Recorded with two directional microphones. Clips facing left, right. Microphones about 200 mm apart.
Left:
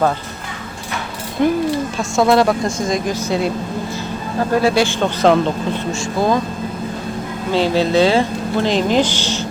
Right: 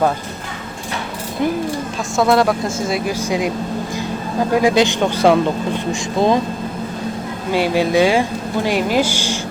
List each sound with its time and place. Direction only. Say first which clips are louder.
1.4 s a woman's voice: left 4 dB; centre (ahead or behind)
4.5 s a woman's voice: right 1 dB; 15° right (ahead or behind)
5.9 s speech: right 2 dB; 20° right (ahead or behind)
7.5 s a woman's voice: left 1 dB; 10° right (ahead or behind)